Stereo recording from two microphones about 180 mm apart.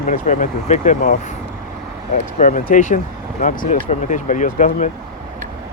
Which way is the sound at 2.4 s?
45° left (ahead or behind).